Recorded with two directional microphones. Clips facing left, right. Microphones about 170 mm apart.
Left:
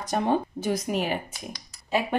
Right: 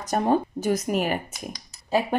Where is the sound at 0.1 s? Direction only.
40° right (ahead or behind).